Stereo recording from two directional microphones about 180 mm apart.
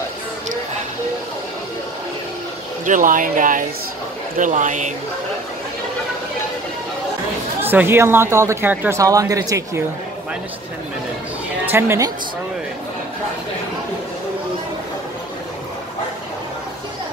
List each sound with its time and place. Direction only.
2.8 s speech: 45° right (ahead or behind)
7.6 s speech: 10° right (ahead or behind)
11.6 s a woman's voice: 15° right (ahead or behind)